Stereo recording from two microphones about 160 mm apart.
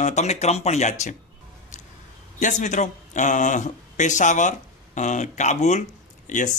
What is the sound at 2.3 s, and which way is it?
Speech, 50° left (ahead or behind).